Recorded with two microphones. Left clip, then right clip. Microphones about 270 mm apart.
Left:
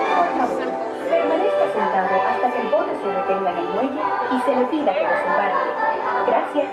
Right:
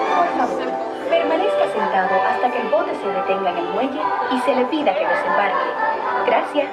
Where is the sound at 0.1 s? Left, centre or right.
Centre.